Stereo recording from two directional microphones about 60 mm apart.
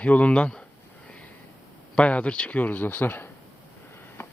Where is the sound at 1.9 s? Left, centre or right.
Left.